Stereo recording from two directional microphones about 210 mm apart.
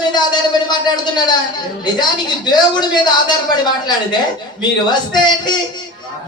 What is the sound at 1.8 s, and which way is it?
A woman's voice, 20° left (ahead or behind).